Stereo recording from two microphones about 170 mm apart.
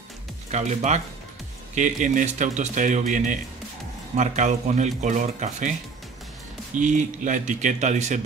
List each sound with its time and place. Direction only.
0.5 s speech: 40° right (ahead or behind)
6.8 s speech: 45° right (ahead or behind)